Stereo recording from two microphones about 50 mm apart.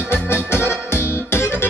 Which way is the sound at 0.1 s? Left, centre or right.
Left.